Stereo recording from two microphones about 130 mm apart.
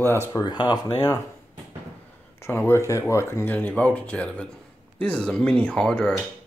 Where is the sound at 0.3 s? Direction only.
30° left (ahead or behind).